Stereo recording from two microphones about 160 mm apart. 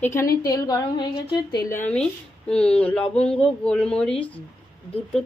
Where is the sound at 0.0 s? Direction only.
15° left (ahead or behind).